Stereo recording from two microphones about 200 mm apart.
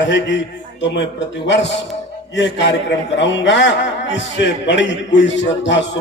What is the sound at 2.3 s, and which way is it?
A man's voice, 60° left (ahead or behind).